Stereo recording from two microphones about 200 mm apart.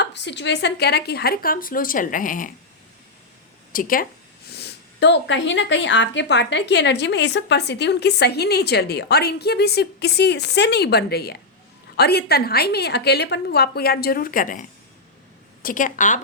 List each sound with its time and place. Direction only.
0.0 s a woman's voice: 60° left (ahead or behind); by 2.5 s 40° left (ahead or behind)
3.7 s speech: 45° left (ahead or behind)
4.4 s a woman's voice: 55° left (ahead or behind)
15.6 s a woman's voice: 40° left (ahead or behind)